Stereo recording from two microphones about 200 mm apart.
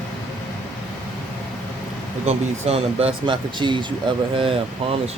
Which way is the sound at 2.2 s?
30° right (ahead or behind).